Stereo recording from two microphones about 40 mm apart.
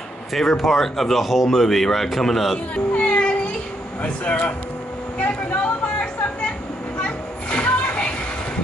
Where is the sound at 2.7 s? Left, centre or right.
Left.